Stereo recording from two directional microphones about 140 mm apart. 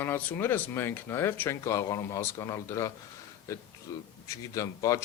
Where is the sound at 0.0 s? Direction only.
15° left (ahead or behind).